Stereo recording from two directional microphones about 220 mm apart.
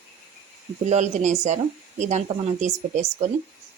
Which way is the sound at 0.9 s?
30° right (ahead or behind).